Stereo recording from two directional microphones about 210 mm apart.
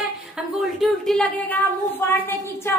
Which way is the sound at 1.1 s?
Centre (ahead or behind).